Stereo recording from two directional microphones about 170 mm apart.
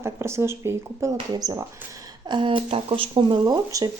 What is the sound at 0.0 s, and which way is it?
Speech, 15° right (ahead or behind).